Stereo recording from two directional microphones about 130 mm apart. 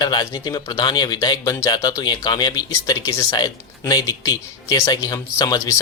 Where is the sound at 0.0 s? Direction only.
30° left (ahead or behind).